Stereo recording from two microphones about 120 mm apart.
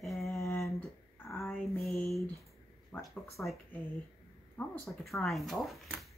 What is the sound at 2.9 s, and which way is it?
Speech, 15° left (ahead or behind).